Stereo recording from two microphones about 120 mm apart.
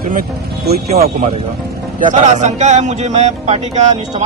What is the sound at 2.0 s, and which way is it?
Speech, 90° right.